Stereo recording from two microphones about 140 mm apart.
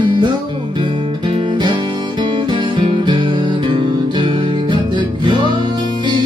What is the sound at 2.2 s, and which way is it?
Music, 35° right (ahead or behind).